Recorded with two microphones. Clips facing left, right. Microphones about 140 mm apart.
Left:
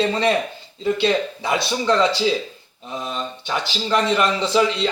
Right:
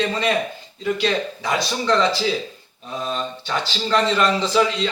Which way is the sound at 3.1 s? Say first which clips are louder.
Right 1 dB; 15° left (ahead or behind).